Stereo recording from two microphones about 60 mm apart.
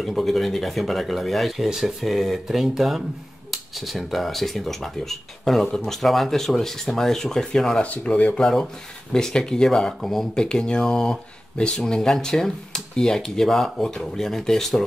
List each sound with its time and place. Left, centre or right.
0.0 s speech: centre
7.8 s speech: left
8.4 s speech: centre